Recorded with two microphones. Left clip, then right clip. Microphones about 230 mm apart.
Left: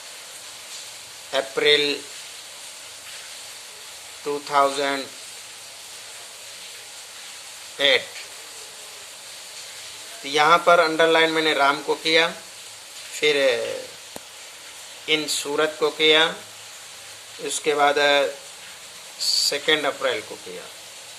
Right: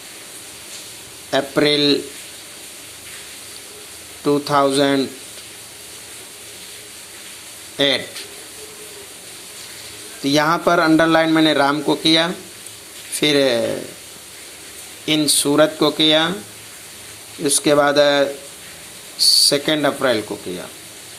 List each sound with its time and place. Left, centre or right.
1.3 s a man's voice: centre
4.3 s a man's voice: centre
7.8 s a man's voice: centre
10.2 s a man's voice: centre
15.0 s a man's voice: centre
17.4 s a man's voice: centre